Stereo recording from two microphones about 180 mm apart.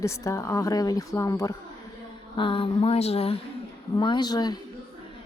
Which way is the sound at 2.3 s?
30° left (ahead or behind).